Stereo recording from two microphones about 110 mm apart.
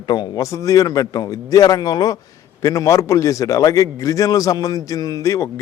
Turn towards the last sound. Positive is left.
turn(degrees=30)  # may be behind; listen again after turning